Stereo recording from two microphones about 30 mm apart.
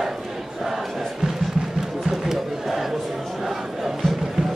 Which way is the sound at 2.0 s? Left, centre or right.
Centre.